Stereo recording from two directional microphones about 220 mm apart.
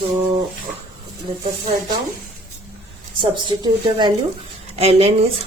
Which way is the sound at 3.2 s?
20° right (ahead or behind).